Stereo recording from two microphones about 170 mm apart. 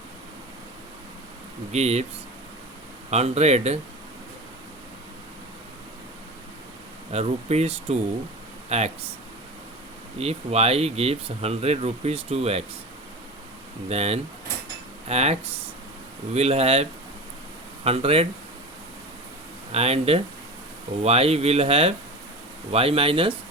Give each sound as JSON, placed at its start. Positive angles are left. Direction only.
{"t": 1.7, "sound": "speech", "side_deg": -40}
{"t": 3.1, "sound": "speech", "side_deg": -40}
{"t": 7.1, "sound": "speech", "side_deg": -40}
{"t": 10.2, "sound": "speech", "side_deg": -35}
{"t": 13.8, "sound": "speech", "side_deg": -40}
{"t": 19.7, "sound": "speech", "side_deg": -35}